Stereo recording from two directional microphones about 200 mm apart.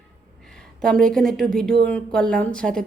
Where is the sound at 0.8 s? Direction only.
5° left (ahead or behind).